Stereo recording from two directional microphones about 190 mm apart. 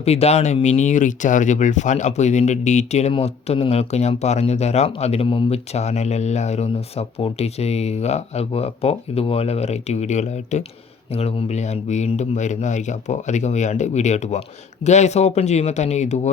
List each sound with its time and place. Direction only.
0.0 s speech: 35° left (ahead or behind)